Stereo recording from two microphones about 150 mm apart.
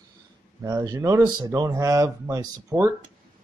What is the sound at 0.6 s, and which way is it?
Speech, 25° right (ahead or behind).